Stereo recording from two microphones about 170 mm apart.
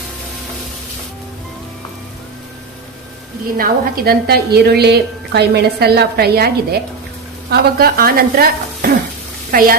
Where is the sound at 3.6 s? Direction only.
65° right (ahead or behind).